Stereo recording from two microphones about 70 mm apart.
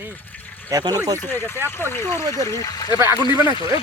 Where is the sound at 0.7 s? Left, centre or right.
Right.